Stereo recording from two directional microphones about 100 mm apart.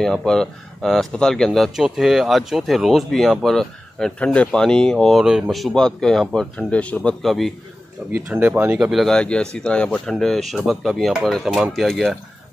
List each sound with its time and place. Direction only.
0.0 s speech: 5° left (ahead or behind)
8.1 s speech: 15° right (ahead or behind)
8.9 s speech: 5° left (ahead or behind)